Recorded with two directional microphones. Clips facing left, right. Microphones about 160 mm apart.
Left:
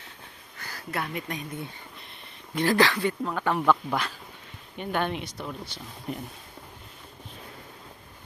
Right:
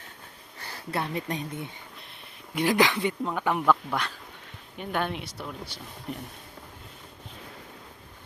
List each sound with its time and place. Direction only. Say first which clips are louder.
0.6 s speech: right 1 dB; 30° right (ahead or behind)
2.6 s speech: left 1 dB; 15° right (ahead or behind)
3.7 s speech: left 1 dB; centre (ahead or behind)